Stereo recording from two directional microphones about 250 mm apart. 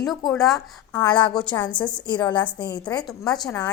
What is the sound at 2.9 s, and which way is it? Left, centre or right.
Speech, centre.